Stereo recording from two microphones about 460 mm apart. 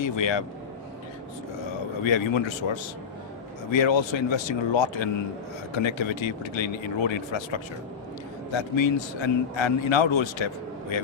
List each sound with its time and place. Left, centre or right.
0.0 s a man's voice: left
2.0 s a man's voice: left